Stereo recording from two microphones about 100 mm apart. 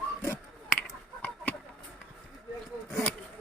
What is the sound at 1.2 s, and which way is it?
Chicken, 20° left (ahead or behind).